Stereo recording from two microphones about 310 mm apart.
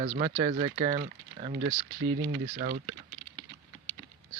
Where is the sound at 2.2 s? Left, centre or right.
Right.